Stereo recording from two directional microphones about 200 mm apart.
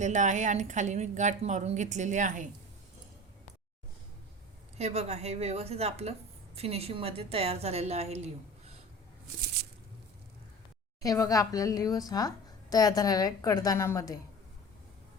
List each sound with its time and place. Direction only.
0.0 s speech: 35° right (ahead or behind)
4.8 s speech: 35° right (ahead or behind)
11.0 s a woman's voice: 15° left (ahead or behind)